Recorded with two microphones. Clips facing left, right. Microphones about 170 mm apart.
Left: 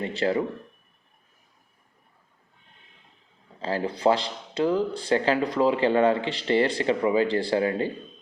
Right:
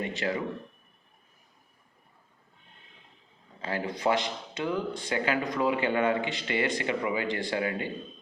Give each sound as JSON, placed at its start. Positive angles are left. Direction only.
{"t": 0.0, "sound": "speech", "side_deg": 30}
{"t": 3.6, "sound": "speech", "side_deg": 35}